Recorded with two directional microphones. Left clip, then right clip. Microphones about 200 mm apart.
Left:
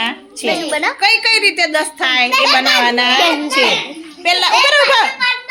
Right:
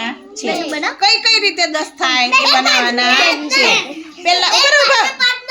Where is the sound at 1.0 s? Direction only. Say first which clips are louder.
Right 1 dB; 10° left (ahead or behind).